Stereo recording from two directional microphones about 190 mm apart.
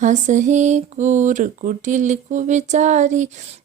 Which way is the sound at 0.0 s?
40° right (ahead or behind).